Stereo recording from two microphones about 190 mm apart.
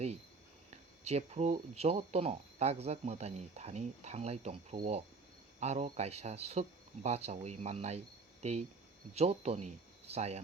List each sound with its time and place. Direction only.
1.0 s speech: 35° right (ahead or behind)